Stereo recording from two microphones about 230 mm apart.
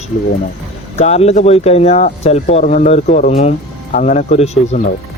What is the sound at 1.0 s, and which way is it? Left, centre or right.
Speech, left.